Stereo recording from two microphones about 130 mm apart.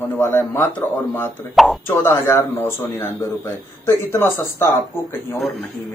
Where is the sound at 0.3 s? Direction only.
20° left (ahead or behind).